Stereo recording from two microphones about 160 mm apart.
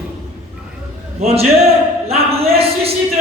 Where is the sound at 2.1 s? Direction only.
40° right (ahead or behind).